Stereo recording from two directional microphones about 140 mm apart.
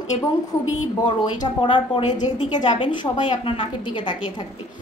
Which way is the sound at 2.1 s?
60° left (ahead or behind).